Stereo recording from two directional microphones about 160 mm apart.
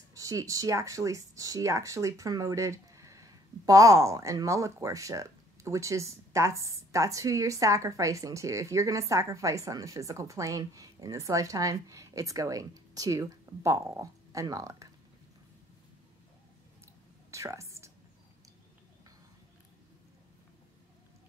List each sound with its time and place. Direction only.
0.1 s speech: 20° right (ahead or behind)
17.3 s whispering: 20° right (ahead or behind)